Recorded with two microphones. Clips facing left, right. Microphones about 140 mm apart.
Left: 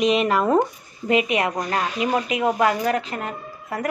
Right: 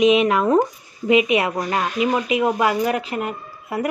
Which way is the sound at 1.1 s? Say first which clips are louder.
Right 4 dB; 40° left (ahead or behind).